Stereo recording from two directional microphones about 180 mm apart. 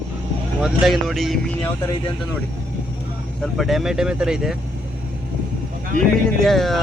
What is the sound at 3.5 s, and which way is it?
Speech, centre (ahead or behind).